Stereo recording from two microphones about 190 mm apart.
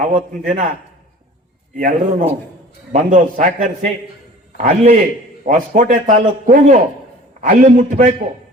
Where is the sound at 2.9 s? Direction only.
40° right (ahead or behind).